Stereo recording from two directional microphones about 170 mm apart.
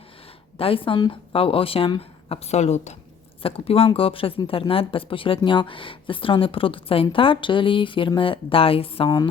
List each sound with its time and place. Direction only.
0.5 s speech: 35° left (ahead or behind)